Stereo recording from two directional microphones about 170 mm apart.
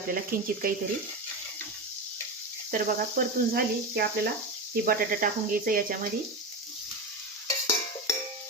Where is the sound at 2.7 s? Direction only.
60° right (ahead or behind).